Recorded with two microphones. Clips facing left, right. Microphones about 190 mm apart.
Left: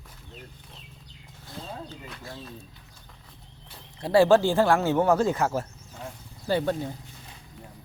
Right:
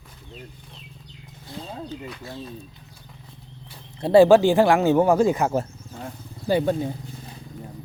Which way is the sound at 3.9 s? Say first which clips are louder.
Right 5 dB; 25° right (ahead or behind).